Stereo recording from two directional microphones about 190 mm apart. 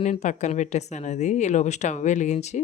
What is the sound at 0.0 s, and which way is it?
Speech, 35° left (ahead or behind).